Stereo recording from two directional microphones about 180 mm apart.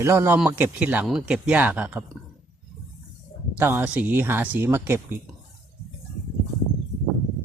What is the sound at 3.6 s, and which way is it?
Speech, 10° right (ahead or behind).